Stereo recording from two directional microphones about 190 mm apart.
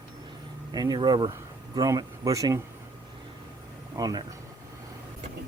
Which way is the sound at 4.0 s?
20° right (ahead or behind).